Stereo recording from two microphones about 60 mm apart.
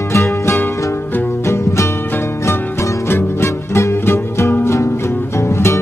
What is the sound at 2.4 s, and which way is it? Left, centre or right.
Music, left.